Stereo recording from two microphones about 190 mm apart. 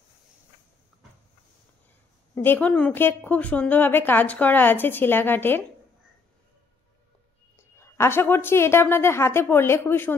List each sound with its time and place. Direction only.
2.3 s a woman's voice: 10° left (ahead or behind)
7.5 s a woman's voice: 15° left (ahead or behind)